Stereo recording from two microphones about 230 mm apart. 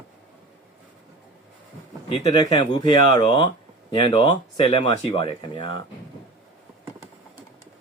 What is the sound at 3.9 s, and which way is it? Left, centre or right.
Speech, left.